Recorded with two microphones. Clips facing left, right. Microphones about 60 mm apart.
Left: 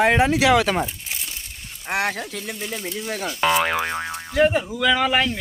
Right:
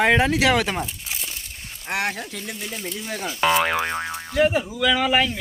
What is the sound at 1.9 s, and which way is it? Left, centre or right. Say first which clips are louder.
Speech: left 2 dB; centre.